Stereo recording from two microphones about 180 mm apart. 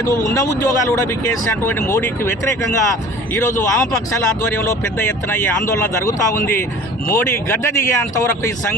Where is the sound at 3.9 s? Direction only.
15° left (ahead or behind).